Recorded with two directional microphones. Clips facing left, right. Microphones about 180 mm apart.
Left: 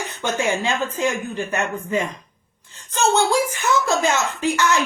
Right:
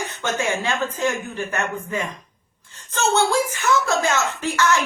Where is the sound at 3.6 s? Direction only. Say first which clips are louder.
Left 1 dB; 15° left (ahead or behind).